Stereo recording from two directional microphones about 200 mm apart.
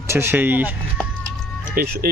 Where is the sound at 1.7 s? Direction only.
45° right (ahead or behind).